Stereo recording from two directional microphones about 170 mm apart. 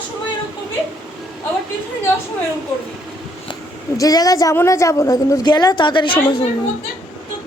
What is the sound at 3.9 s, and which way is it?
A woman's voice, 20° left (ahead or behind).